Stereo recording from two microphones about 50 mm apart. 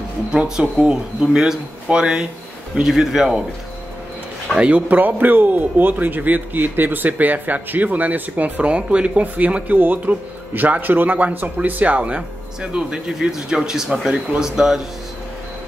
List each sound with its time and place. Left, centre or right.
0.3 s speech: centre
4.6 s a man's voice: right; by 14.8 s centre